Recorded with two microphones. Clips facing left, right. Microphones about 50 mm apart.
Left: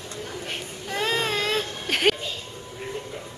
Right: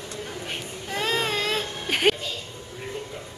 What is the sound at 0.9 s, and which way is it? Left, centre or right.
Baby cry, centre.